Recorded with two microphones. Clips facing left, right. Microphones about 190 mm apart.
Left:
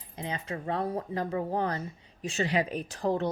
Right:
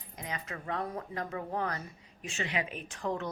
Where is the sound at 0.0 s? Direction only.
30° left (ahead or behind).